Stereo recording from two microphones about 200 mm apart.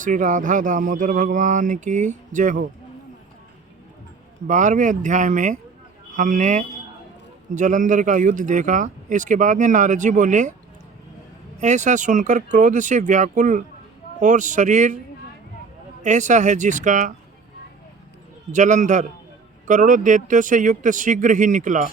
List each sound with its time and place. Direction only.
0.0 s speech: 40° right (ahead or behind)
4.4 s speech: 40° right (ahead or behind)
11.6 s speech: 35° right (ahead or behind)
16.0 s speech: 35° right (ahead or behind)
18.5 s speech: 35° right (ahead or behind)